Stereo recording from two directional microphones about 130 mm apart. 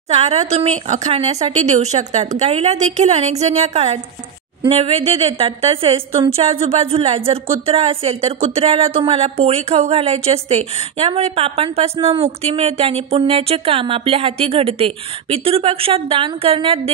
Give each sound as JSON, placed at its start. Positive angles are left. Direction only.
{"t": 0.1, "sound": "speech", "side_deg": -55}
{"t": 4.6, "sound": "a woman's voice", "side_deg": -45}